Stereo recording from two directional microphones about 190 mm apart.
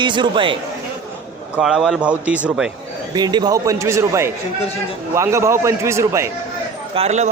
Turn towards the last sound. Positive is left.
turn(degrees=-35)  # may be behind; listen again after turning